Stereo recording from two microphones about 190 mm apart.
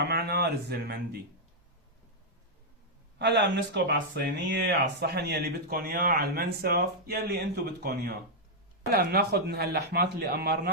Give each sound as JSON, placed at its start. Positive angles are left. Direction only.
{"t": 0.0, "sound": "speech", "side_deg": -55}
{"t": 3.2, "sound": "speech", "side_deg": -65}